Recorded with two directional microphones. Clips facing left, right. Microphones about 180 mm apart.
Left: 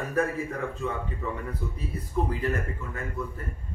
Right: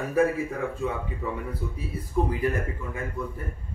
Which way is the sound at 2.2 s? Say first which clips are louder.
Right 2 dB; 15° right (ahead or behind).